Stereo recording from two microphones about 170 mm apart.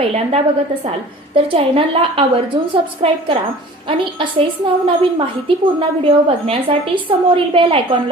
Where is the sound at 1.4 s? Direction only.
35° right (ahead or behind).